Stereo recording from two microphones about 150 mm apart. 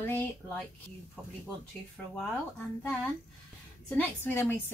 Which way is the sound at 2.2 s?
10° left (ahead or behind).